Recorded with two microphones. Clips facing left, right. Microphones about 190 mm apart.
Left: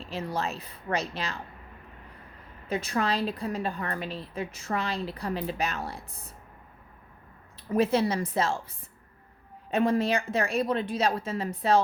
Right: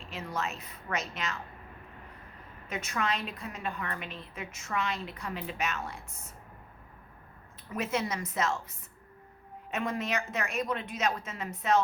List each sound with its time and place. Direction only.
0.0 s a woman's voice: 35° left (ahead or behind)
2.6 s a woman's voice: 35° left (ahead or behind)
7.7 s a woman's voice: 30° left (ahead or behind)
9.6 s a woman's voice: 30° left (ahead or behind)